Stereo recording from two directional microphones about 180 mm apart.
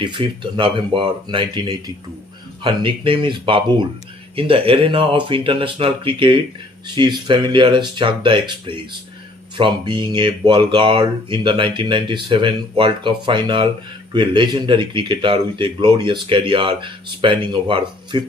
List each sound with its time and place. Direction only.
0.0 s speech: 25° right (ahead or behind)